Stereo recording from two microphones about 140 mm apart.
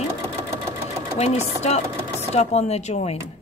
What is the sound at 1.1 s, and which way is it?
A woman's voice, 50° left (ahead or behind).